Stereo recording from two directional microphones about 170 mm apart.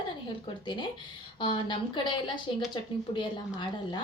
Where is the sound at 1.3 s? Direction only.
30° left (ahead or behind).